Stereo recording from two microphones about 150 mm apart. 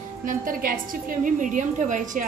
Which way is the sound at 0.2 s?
65° right (ahead or behind).